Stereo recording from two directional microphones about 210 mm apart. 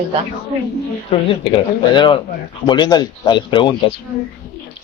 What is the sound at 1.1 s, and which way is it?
Speech, 25° left (ahead or behind).